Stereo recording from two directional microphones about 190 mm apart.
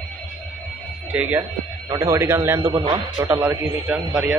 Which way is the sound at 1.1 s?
10° right (ahead or behind).